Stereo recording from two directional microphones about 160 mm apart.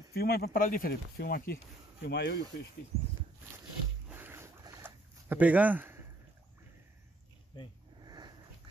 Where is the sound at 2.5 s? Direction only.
90° left.